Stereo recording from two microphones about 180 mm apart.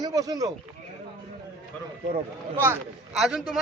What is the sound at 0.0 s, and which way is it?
Speech, 20° right (ahead or behind).